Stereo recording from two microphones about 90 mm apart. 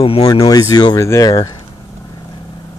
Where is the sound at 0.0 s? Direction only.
90° left.